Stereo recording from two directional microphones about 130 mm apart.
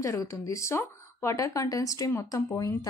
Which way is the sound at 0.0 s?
25° left (ahead or behind).